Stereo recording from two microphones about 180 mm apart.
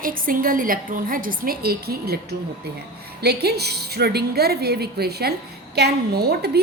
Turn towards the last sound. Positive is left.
turn(degrees=-65)  # may be behind; listen again after turning